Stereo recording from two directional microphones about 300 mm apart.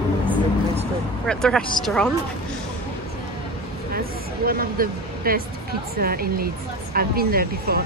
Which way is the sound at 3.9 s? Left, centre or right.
Right.